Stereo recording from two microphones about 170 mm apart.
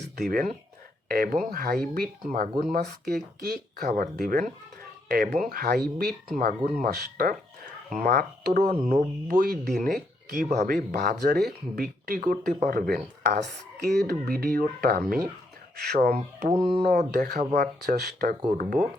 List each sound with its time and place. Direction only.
0.0 s speech: 60° right (ahead or behind)
3.8 s speech: 55° right (ahead or behind)
10.5 s speech: 45° right (ahead or behind); by 14.0 s 75° right (ahead or behind)
14.1 s speech: 60° right (ahead or behind)
16.1 s speech: 45° right (ahead or behind)
16.6 s speech: 30° right (ahead or behind)
16.9 s speech: 60° right (ahead or behind)
18.5 s speech: 55° right (ahead or behind)